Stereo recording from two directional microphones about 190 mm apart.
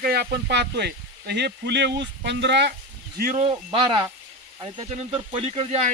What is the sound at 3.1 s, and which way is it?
Speech, 50° right (ahead or behind).